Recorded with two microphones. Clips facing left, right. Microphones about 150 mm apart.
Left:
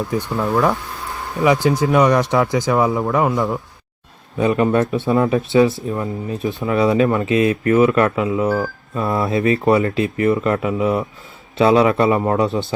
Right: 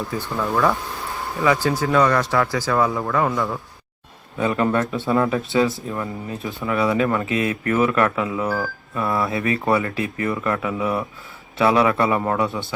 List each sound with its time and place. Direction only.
0.1 s speech: 15° left (ahead or behind)